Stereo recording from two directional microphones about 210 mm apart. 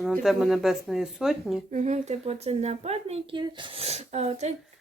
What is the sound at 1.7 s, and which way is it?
Speech, 35° right (ahead or behind).